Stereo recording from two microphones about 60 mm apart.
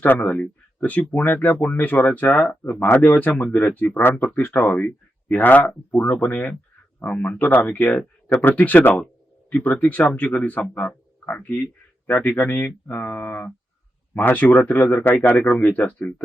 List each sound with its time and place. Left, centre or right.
0.0 s speech: left
4.1 s speech: left
15.9 s speech: centre